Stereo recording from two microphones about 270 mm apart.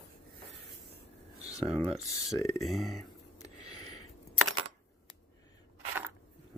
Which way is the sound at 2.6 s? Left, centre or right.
Centre.